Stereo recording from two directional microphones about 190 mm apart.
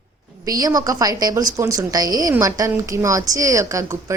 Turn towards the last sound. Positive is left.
turn(degrees=-15)  # may be behind; listen again after turning